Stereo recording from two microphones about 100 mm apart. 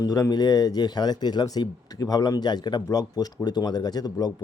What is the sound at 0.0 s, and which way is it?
A man's voice, 40° left (ahead or behind).